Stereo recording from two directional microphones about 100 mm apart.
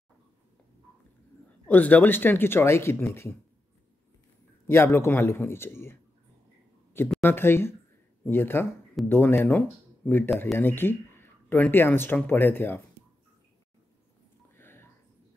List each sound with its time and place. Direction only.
1.7 s speech: 15° left (ahead or behind)
4.6 s speech: 25° left (ahead or behind)
7.2 s speech: 25° left (ahead or behind)
9.0 s speech: centre (ahead or behind)
9.4 s speech: 20° left (ahead or behind)
14.6 s a sound: 25° left (ahead or behind)